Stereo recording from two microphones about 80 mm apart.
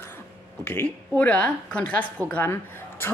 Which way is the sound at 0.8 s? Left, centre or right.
Centre.